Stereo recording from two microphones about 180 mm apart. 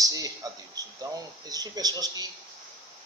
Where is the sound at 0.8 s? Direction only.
20° right (ahead or behind).